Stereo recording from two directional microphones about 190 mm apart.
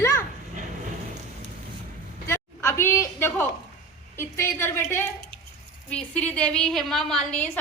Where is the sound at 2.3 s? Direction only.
15° left (ahead or behind).